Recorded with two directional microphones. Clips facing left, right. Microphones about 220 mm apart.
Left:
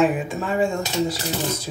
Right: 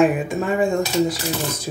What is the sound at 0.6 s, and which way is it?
Speech, 15° right (ahead or behind).